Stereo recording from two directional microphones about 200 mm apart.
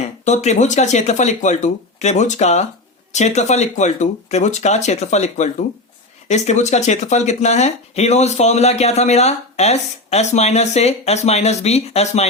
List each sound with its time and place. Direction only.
0.3 s speech: 35° left (ahead or behind)